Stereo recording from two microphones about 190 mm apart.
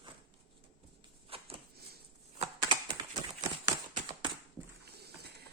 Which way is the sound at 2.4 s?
25° right (ahead or behind).